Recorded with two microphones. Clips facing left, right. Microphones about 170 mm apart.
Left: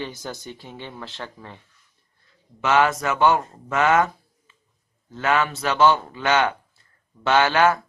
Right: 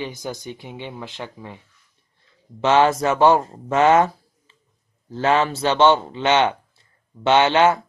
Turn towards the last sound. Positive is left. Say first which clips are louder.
# right 2 dB
turn(degrees=-20)  # may be behind; listen again after turning